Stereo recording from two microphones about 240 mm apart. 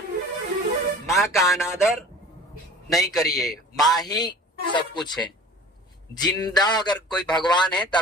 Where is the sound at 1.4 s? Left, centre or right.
Centre.